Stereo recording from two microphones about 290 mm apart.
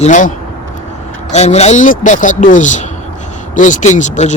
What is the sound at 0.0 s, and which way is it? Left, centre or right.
Speech, left.